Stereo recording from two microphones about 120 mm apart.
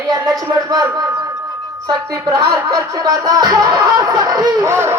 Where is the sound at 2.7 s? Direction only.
30° right (ahead or behind).